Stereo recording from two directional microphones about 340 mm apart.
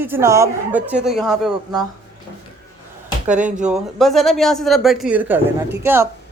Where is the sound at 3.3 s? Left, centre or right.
Centre.